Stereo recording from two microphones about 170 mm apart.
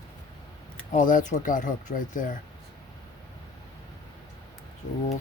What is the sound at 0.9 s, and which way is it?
Speech, 50° left (ahead or behind).